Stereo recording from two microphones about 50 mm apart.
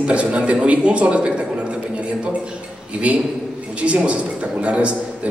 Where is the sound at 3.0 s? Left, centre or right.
Right.